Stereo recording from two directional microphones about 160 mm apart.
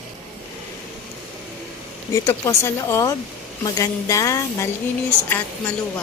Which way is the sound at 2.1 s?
20° left (ahead or behind).